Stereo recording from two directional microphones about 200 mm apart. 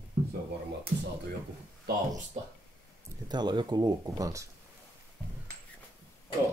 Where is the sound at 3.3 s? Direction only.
20° right (ahead or behind).